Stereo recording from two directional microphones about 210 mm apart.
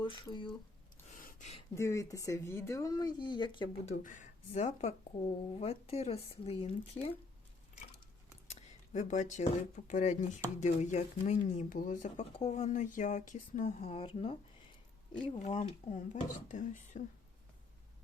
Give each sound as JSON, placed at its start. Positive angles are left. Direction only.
{"t": 0.0, "sound": "speech", "side_deg": 20}
{"t": 1.2, "sound": "a sound", "side_deg": 40}
{"t": 1.7, "sound": "speech", "side_deg": 15}
{"t": 3.9, "sound": "speech", "side_deg": 35}
{"t": 8.9, "sound": "speech", "side_deg": 35}